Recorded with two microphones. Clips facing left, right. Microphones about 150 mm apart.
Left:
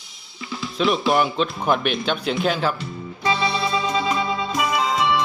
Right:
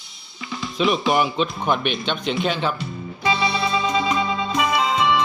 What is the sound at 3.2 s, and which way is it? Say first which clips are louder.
Music: even; 15° right (ahead or behind).